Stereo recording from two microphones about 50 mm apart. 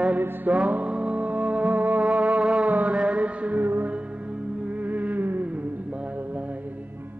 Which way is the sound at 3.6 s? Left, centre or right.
Right.